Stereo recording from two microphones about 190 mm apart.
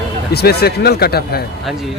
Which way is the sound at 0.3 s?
55° left (ahead or behind).